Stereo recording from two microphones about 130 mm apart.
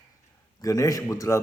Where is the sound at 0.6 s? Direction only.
25° left (ahead or behind).